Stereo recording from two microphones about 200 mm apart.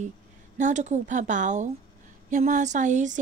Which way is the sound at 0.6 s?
35° right (ahead or behind).